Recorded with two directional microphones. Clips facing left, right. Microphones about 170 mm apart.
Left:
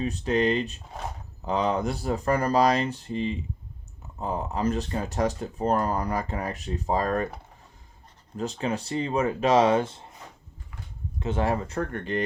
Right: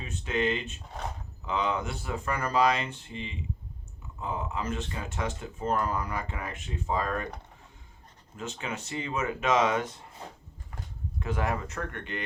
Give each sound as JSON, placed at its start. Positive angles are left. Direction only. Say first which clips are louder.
{"t": 0.0, "sound": "speech", "louder": "left 6 dB", "side_deg": 40}
{"t": 8.4, "sound": "speech", "louder": "left 7 dB", "side_deg": 35}
{"t": 11.2, "sound": "speech", "louder": "left 5 dB", "side_deg": 25}